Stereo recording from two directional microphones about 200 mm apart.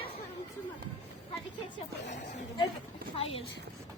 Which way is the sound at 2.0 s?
35° left (ahead or behind).